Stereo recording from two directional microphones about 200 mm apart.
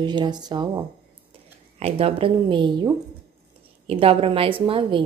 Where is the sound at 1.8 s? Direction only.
30° right (ahead or behind).